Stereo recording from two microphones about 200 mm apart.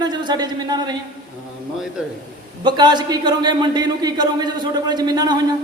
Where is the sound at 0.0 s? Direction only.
20° right (ahead or behind).